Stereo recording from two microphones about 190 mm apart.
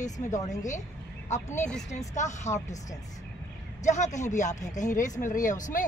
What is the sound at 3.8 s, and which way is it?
Speech, 40° left (ahead or behind).